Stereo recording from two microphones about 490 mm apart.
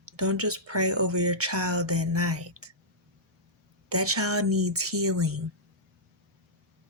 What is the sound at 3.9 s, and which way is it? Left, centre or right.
Speech, right.